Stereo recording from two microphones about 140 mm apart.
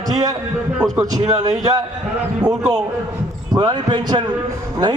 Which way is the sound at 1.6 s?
25° right (ahead or behind).